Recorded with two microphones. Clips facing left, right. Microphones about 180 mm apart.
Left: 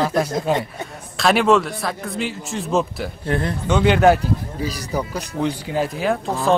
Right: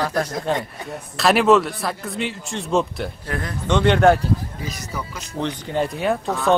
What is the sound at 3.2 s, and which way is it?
Speech, 30° left (ahead or behind).